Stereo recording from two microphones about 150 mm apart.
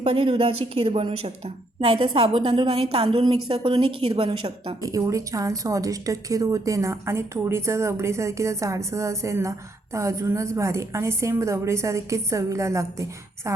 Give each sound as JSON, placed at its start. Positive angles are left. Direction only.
{"t": 0.0, "sound": "a woman's voice", "side_deg": -40}
{"t": 4.8, "sound": "a woman's voice", "side_deg": -20}